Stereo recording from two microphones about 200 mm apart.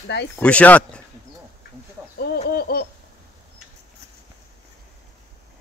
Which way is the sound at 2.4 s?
50° left (ahead or behind).